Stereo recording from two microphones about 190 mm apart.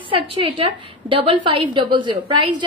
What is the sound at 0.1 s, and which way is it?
A woman's voice, 30° right (ahead or behind).